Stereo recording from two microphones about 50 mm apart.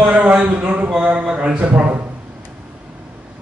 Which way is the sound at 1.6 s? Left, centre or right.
Right.